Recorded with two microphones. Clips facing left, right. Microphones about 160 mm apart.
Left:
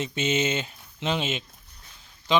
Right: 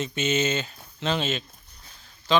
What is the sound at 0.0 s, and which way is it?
Speech, 25° left (ahead or behind).